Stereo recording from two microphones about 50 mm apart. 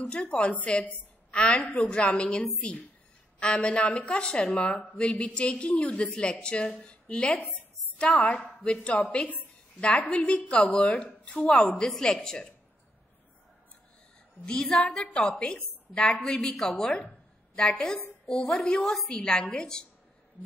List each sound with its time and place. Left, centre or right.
0.1 s a woman's voice: left
11.8 s a woman's voice: centre
14.4 s a woman's voice: centre
16.8 s a woman's voice: left